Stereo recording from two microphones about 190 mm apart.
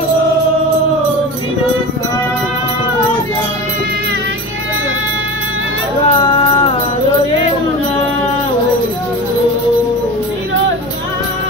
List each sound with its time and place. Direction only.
6.0 s music: 30° left (ahead or behind)